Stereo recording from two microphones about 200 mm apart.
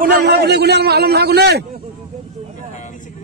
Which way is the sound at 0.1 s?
55° right (ahead or behind).